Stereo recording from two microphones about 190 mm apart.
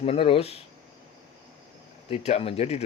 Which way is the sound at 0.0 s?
30° left (ahead or behind).